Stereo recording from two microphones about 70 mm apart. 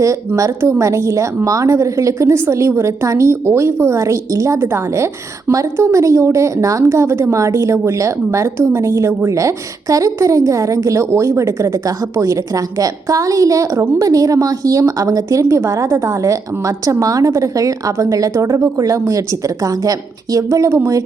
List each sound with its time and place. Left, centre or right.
0.3 s a woman's voice: right